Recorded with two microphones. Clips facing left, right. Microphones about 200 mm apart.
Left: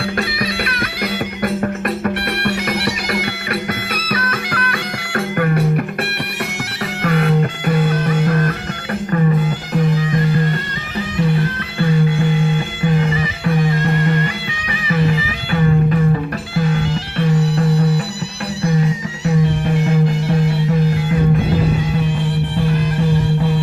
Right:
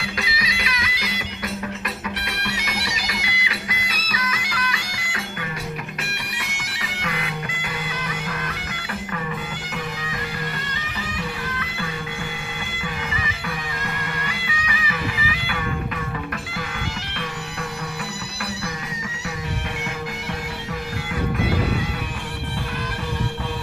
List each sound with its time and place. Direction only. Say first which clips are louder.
0.0 s music: left 9 dB; 55° left (ahead or behind)
7.0 s music: left 14 dB; 55° left (ahead or behind)
12.8 s music: left 13 dB; 40° left (ahead or behind)